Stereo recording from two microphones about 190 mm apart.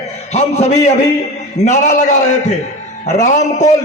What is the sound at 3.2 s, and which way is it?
Speech, 40° left (ahead or behind).